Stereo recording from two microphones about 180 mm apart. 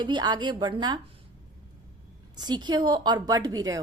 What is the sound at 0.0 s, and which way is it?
Speech, 25° right (ahead or behind).